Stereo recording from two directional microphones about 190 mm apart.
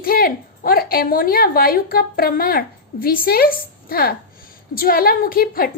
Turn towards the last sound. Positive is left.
turn(degrees=50)  # may be behind; listen again after turning